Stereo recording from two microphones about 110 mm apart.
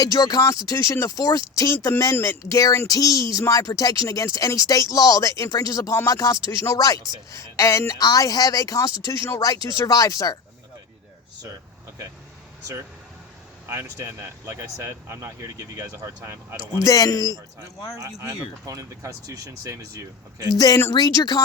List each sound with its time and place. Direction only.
0.0 s speech: 35° left (ahead or behind)
13.7 s speech: 25° right (ahead or behind)
16.8 s speech: 30° left (ahead or behind)
17.9 s speech: 25° right (ahead or behind)
20.9 s speech: 35° left (ahead or behind)